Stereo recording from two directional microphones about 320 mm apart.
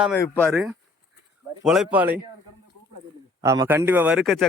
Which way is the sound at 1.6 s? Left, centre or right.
Centre.